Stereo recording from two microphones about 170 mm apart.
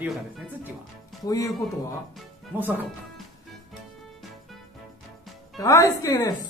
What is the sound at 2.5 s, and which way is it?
Speech, 10° right (ahead or behind).